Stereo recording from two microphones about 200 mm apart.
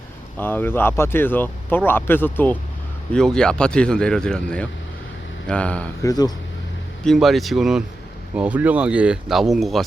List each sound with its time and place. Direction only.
0.3 s speech: 10° left (ahead or behind)
6.1 s speech: 20° left (ahead or behind)
7.0 s speech: centre (ahead or behind)